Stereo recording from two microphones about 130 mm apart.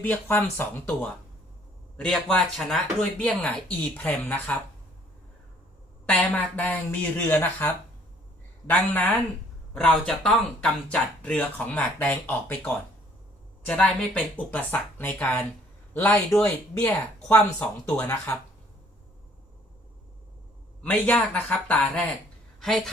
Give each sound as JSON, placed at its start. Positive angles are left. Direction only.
{"t": 0.0, "sound": "speech", "side_deg": 15}
{"t": 2.0, "sound": "speech", "side_deg": 5}
{"t": 6.1, "sound": "a man's voice", "side_deg": 10}
{"t": 21.3, "sound": "speech", "side_deg": 10}